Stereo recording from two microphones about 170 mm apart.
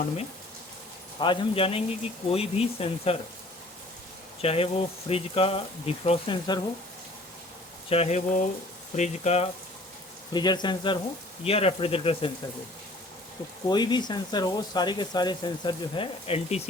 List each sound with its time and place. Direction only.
1.2 s speech: 30° left (ahead or behind)
4.4 s speech: 35° left (ahead or behind)
7.9 s speech: 40° left (ahead or behind)
10.3 s speech: 25° left (ahead or behind)
13.7 s speech: 25° left (ahead or behind)